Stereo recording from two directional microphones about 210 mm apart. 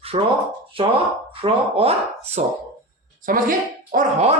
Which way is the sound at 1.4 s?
25° right (ahead or behind).